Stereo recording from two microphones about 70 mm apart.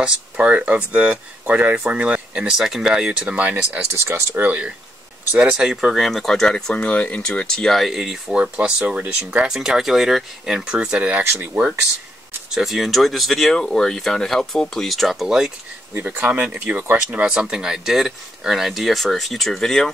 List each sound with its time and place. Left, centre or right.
0.0 s speech: centre
3.9 s speech: right
4.4 s speech: centre
9.5 s speech: centre
12.4 s speech: centre
15.9 s speech: right; by 19.9 s centre